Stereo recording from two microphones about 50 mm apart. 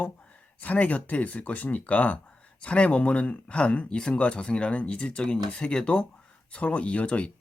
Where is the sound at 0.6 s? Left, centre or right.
Left.